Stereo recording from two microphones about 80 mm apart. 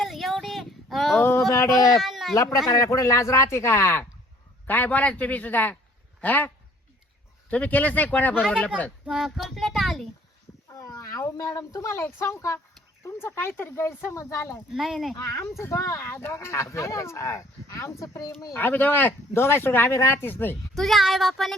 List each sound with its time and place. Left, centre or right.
0.0 s child singing: centre
1.2 s a sound: left
2.0 s a sound: centre
2.3 s a man's voice: left
4.6 s speech: left
7.5 s speech: centre
9.0 s speech: centre
10.7 s speech: left
14.7 s speech: centre
15.1 s speech: left
18.5 s speech: left
19.9 s speech: left
20.2 s speech: left
20.7 s speech: centre